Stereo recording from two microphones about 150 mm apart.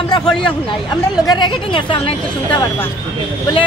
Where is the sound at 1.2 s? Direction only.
30° left (ahead or behind).